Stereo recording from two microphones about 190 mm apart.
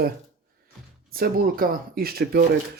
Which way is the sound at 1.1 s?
50° right (ahead or behind).